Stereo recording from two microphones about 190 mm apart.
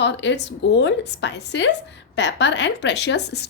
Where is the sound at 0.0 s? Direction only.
65° left (ahead or behind).